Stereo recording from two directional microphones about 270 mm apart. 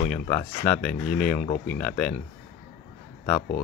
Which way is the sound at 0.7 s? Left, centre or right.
Centre.